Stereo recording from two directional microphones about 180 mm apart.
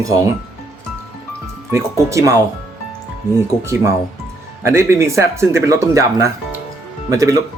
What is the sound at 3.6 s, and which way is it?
Speech, 15° right (ahead or behind).